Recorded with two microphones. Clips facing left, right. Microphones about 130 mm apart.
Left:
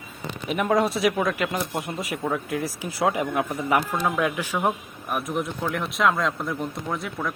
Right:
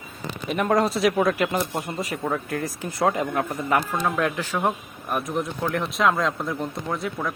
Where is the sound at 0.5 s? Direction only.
Centre (ahead or behind).